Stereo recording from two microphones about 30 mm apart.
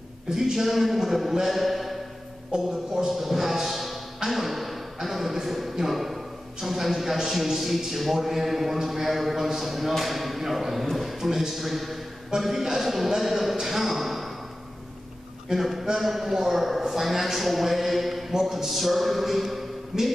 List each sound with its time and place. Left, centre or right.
0.3 s a man's voice: centre
2.5 s speech: right
3.1 s speech: centre
10.9 s a sound: centre
11.2 s speech: centre
15.4 s a man's voice: centre